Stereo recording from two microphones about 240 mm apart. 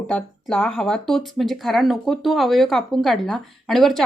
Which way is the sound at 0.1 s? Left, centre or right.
Centre.